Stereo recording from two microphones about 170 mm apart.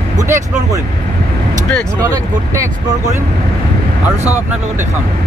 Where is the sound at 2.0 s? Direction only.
20° right (ahead or behind).